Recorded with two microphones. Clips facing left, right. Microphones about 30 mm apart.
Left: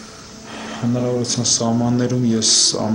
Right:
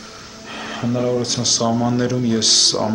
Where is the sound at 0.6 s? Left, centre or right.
Centre.